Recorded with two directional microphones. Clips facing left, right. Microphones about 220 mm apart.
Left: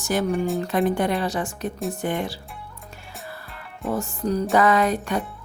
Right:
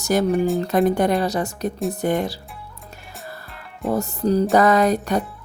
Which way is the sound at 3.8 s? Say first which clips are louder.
Right 4 dB; 35° right (ahead or behind).